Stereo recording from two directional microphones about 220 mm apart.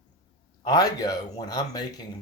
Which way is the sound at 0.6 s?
15° left (ahead or behind).